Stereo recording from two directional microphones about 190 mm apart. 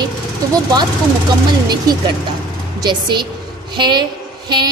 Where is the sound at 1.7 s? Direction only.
20° right (ahead or behind).